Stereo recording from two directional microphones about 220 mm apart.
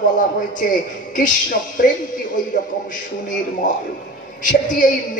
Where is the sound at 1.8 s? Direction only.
40° left (ahead or behind).